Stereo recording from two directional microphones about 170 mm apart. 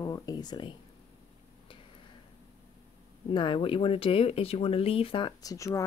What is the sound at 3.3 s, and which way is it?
Speech, 30° left (ahead or behind).